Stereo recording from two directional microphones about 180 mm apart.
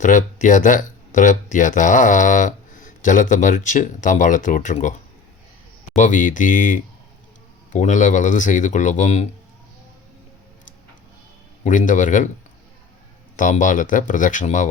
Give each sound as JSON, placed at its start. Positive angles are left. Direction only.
{"t": 0.0, "sound": "speech", "side_deg": 45}
{"t": 6.0, "sound": "speech", "side_deg": 45}
{"t": 11.6, "sound": "speech", "side_deg": 45}
{"t": 13.3, "sound": "speech", "side_deg": 45}